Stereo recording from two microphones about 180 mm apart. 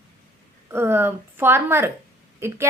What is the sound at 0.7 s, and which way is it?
Speech, 15° right (ahead or behind).